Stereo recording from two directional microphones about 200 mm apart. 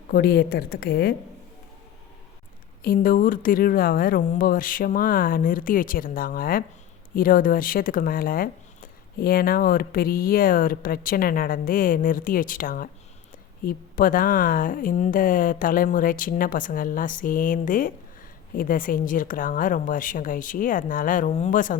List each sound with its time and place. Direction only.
0.1 s speech: 50° left (ahead or behind)
2.8 s speech: 45° left (ahead or behind)